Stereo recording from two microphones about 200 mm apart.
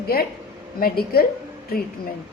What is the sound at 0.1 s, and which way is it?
A woman's voice, 50° left (ahead or behind).